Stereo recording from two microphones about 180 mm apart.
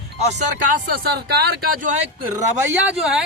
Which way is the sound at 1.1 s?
65° right (ahead or behind).